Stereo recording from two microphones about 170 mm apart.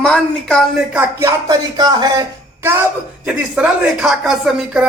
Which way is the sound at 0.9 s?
20° right (ahead or behind).